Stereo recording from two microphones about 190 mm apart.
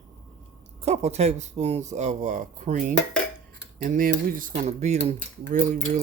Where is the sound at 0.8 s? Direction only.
35° right (ahead or behind).